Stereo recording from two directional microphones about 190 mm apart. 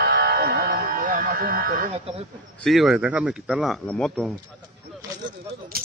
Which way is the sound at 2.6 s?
Centre (ahead or behind).